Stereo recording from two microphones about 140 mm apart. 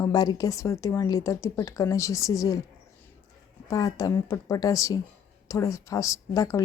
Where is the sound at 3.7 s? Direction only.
25° left (ahead or behind).